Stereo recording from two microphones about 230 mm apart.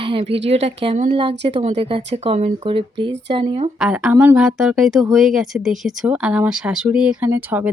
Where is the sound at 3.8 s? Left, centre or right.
Centre.